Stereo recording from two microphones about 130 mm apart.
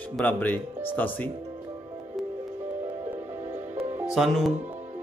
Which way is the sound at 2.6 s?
15° right (ahead or behind).